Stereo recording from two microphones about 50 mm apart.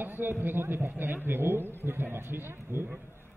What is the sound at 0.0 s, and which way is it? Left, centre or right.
A man's voice, right.